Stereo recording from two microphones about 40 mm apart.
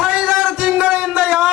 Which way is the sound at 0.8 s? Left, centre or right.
Right.